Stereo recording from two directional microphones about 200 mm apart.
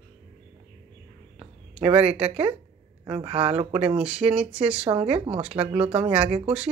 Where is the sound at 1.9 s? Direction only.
5° right (ahead or behind).